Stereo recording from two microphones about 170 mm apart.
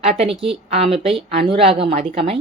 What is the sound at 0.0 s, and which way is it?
A woman's voice, 40° right (ahead or behind).